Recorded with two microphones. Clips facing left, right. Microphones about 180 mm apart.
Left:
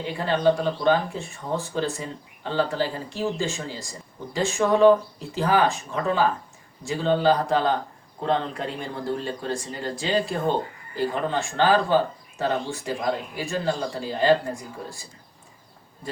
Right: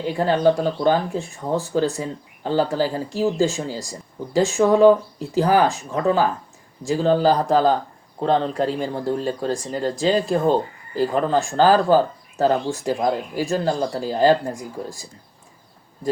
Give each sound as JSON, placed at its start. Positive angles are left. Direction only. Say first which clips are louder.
{"t": 0.0, "sound": "speech", "louder": "right 4 dB", "side_deg": -40}